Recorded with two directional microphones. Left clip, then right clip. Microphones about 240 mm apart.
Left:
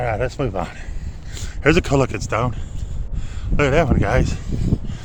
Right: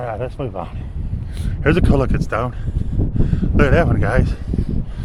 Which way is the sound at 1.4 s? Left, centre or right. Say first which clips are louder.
Left 1 dB; centre.